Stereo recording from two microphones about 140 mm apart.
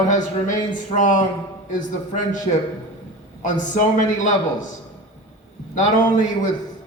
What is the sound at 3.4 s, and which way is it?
A man's voice, 60° left (ahead or behind).